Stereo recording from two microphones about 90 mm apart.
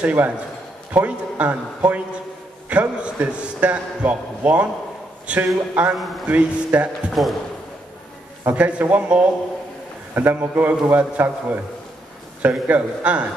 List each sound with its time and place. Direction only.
0.0 s a man's voice: 20° right (ahead or behind)
5.9 s a man's voice: centre (ahead or behind)
6.2 s a man's voice: 15° right (ahead or behind)
7.1 s a man's voice: centre (ahead or behind)
8.5 s a man's voice: 15° right (ahead or behind)